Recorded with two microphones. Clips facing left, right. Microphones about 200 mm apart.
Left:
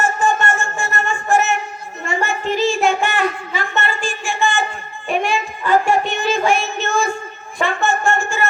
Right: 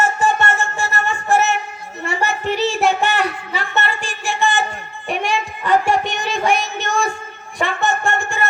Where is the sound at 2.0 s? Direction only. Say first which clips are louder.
Even; 65° right (ahead or behind).